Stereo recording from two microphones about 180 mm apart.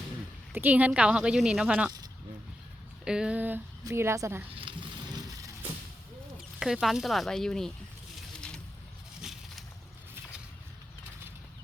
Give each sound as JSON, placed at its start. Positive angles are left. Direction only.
{"t": 0.5, "sound": "a woman's voice", "side_deg": -10}
{"t": 3.0, "sound": "a woman's voice", "side_deg": -5}
{"t": 4.4, "sound": "speech", "side_deg": -30}
{"t": 6.6, "sound": "speech", "side_deg": -5}
{"t": 8.4, "sound": "a sound", "side_deg": 5}